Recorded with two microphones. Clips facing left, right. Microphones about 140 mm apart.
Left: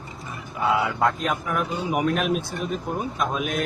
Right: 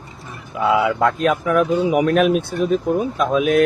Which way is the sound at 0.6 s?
90° right.